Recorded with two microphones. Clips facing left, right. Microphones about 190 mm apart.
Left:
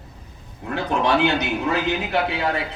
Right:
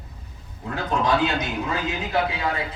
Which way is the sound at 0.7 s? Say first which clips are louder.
Left 2 dB; 70° left (ahead or behind).